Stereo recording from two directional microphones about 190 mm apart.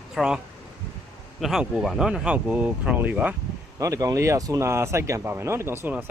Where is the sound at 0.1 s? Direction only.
5° right (ahead or behind).